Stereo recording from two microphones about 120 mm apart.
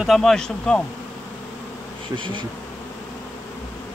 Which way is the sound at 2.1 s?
40° right (ahead or behind).